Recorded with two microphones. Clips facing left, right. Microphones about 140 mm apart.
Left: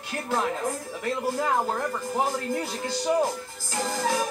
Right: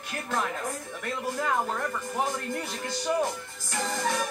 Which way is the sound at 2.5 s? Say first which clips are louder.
Left 4 dB; 30° left (ahead or behind).